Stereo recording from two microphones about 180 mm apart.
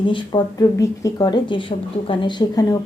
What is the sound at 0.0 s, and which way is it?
Speech, 25° left (ahead or behind).